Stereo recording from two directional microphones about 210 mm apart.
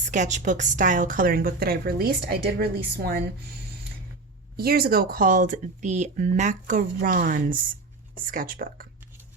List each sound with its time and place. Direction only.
0.0 s a woman's voice: 35° right (ahead or behind)
4.5 s speech: 45° right (ahead or behind)